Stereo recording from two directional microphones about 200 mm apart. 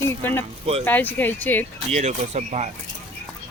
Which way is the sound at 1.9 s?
35° right (ahead or behind).